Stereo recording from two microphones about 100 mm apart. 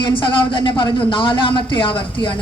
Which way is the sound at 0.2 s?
55° left (ahead or behind).